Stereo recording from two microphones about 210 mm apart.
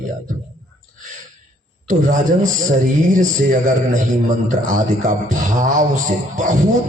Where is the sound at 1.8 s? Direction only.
40° right (ahead or behind).